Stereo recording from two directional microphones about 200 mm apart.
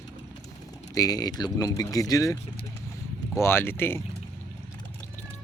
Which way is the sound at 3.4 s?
10° left (ahead or behind).